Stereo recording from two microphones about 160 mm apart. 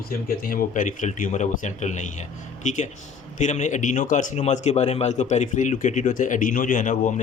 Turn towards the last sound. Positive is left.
turn(degrees=55)  # may be behind; listen again after turning